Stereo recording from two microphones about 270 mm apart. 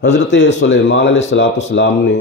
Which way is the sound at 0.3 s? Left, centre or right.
Left.